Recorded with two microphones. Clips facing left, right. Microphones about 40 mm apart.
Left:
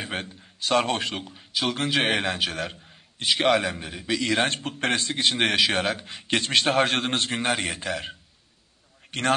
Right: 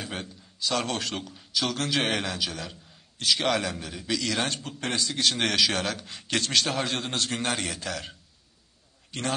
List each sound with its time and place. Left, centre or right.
0.0 s a man's voice: left
2.2 s a man's voice: left
2.9 s a man's voice: left
5.1 s a man's voice: left
6.7 s a man's voice: left
7.2 s a man's voice: left
9.1 s a man's voice: left